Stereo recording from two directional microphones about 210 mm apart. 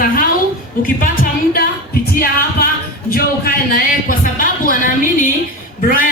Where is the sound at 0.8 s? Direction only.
40° left (ahead or behind).